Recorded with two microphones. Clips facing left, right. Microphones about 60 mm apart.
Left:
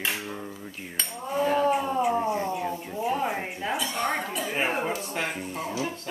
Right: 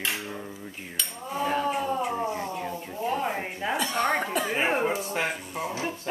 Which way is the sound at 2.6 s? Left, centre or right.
Centre.